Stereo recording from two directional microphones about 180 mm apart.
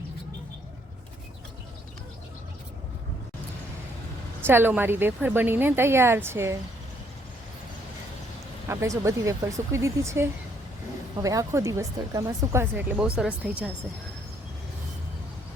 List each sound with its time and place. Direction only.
4.4 s speech: 10° right (ahead or behind)
8.6 s speech: 15° right (ahead or behind)